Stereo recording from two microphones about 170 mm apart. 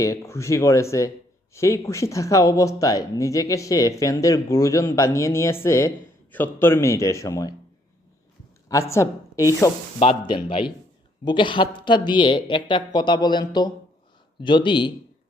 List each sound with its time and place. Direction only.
0.0 s speech: 20° left (ahead or behind)
8.7 s a woman's voice: 15° left (ahead or behind)
10.0 s speech: 30° left (ahead or behind)